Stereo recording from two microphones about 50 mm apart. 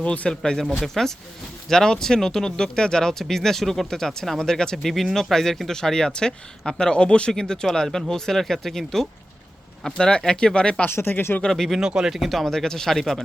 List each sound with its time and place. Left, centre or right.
0.0 s speech: left
0.6 s speech: centre
1.7 s speech: centre
9.8 s speech: centre
10.8 s speech: left
11.4 s speech: centre
11.8 s speech: centre
12.1 s speech: centre
12.5 s speech: centre